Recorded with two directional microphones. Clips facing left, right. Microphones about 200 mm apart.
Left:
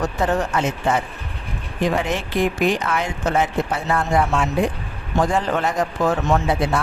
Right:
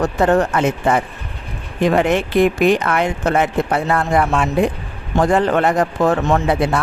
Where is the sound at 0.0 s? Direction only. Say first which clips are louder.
Right 6 dB; 60° right (ahead or behind).